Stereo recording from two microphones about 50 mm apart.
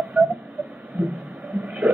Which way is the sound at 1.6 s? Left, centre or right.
Right.